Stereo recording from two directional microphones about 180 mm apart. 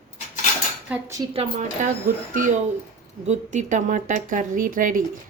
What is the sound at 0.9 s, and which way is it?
Cutlery, 15° right (ahead or behind).